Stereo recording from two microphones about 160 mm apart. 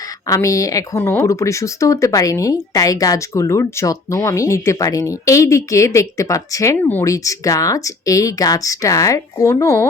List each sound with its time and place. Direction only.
0.3 s speech: 20° left (ahead or behind)